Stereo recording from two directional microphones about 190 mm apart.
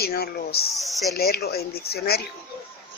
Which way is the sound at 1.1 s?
55° left (ahead or behind).